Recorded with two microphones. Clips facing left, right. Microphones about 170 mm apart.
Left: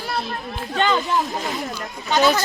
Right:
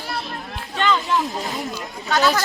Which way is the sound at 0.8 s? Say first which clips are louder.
Left 1 dB; 45° left (ahead or behind).